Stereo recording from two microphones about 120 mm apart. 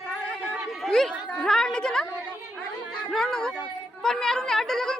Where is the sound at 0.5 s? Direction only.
5° left (ahead or behind).